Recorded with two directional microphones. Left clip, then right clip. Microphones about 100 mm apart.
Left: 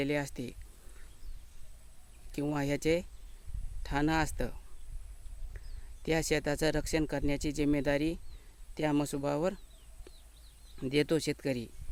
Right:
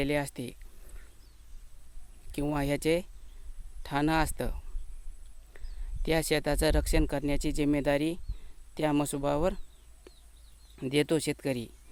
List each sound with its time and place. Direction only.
0.0 s speech: 35° right (ahead or behind)
2.3 s speech: 35° right (ahead or behind)
10.8 s speech: 40° right (ahead or behind)